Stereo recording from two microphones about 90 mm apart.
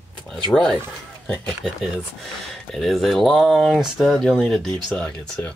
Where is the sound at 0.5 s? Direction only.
10° left (ahead or behind).